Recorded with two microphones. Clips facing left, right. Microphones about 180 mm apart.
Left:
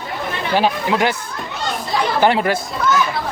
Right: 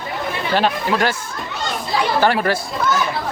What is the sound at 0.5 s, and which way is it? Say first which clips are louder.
Speech: left 1 dB; 15° left (ahead or behind).